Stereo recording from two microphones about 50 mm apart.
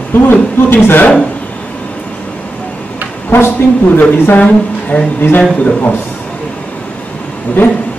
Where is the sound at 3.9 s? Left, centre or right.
Left.